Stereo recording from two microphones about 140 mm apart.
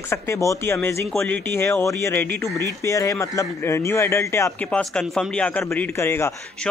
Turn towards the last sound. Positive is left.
turn(degrees=15)  # may be behind; listen again after turning